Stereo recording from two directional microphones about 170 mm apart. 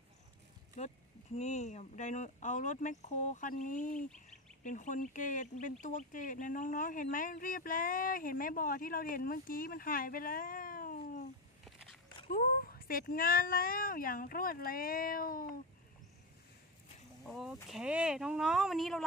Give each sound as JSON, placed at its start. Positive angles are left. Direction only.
{"t": 0.7, "sound": "speech", "side_deg": 45}
{"t": 11.6, "sound": "a sound", "side_deg": 0}
{"t": 12.3, "sound": "speech", "side_deg": 60}
{"t": 17.3, "sound": "speech", "side_deg": 0}